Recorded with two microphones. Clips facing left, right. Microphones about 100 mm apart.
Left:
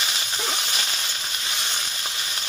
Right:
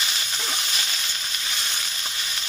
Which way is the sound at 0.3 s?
20° left (ahead or behind).